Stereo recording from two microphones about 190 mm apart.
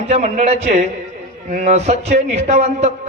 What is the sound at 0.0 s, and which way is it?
A man's voice, 35° right (ahead or behind).